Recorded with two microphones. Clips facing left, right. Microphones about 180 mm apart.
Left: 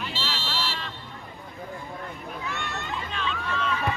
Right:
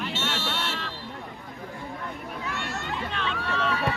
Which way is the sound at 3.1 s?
60° right (ahead or behind).